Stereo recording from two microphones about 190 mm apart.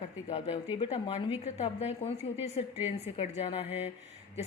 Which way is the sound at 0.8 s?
30° left (ahead or behind).